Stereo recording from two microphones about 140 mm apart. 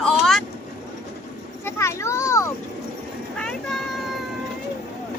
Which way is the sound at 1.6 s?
20° left (ahead or behind).